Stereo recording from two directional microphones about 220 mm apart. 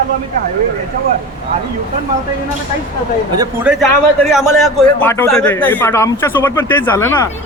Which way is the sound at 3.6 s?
Centre (ahead or behind).